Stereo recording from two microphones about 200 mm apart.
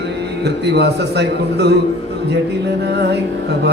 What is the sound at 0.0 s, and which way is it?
Speech, 55° right (ahead or behind).